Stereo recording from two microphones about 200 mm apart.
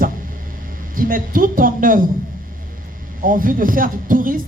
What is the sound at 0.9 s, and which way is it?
Speech, 45° right (ahead or behind).